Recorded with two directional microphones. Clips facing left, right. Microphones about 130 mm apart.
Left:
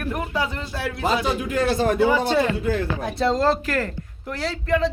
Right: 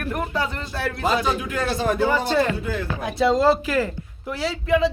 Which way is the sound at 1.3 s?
45° left (ahead or behind).